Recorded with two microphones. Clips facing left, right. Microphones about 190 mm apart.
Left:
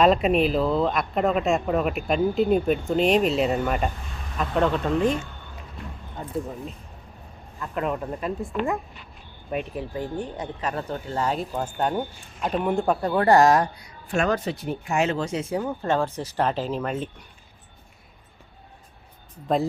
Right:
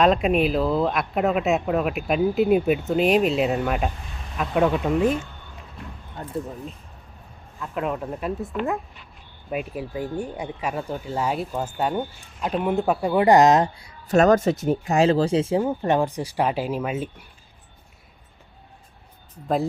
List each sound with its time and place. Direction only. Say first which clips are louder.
0.0 s speech: even; centre (ahead or behind)
6.2 s speech: even; centre (ahead or behind)
7.6 s speech: even; centre (ahead or behind); by 13.9 s 25° right (ahead or behind)
14.1 s speech: right 7 dB; 40° right (ahead or behind); by 17.2 s 5° right (ahead or behind)